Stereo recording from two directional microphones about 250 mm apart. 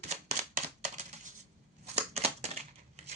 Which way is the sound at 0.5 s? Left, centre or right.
Right.